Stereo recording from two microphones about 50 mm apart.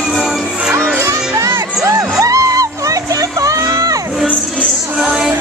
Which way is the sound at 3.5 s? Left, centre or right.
Right.